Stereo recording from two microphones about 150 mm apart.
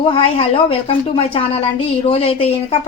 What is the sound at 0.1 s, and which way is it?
A woman's voice, 35° left (ahead or behind).